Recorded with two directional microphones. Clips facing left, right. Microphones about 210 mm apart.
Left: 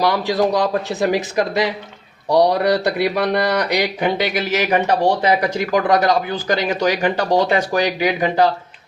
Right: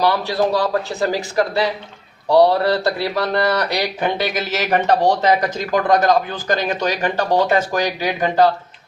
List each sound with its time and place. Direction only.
0.0 s speech: 15° left (ahead or behind)